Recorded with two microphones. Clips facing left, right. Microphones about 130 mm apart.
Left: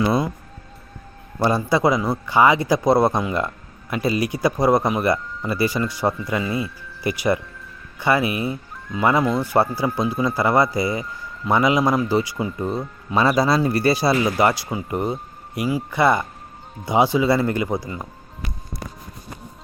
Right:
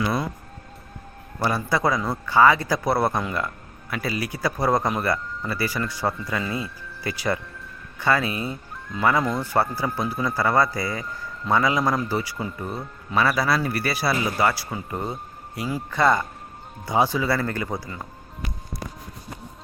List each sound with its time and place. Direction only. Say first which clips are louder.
0.0 s music: left 5 dB; 25° left (ahead or behind)
1.4 s speech: left 5 dB; 20° left (ahead or behind)